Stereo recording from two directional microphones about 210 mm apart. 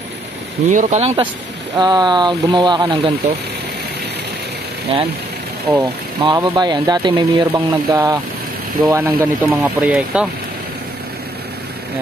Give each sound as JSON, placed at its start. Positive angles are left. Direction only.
{"t": 0.7, "sound": "speech", "side_deg": -35}
{"t": 4.9, "sound": "speech", "side_deg": -25}
{"t": 6.2, "sound": "speech", "side_deg": -20}